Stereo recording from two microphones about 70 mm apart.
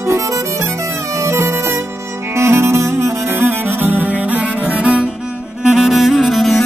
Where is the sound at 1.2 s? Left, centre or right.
Right; by 5.1 s centre.